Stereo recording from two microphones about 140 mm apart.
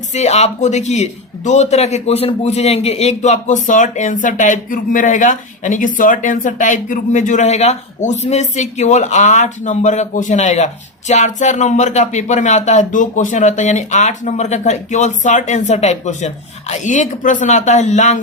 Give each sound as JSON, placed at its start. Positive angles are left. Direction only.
{"t": 0.1, "sound": "a man's voice", "side_deg": 50}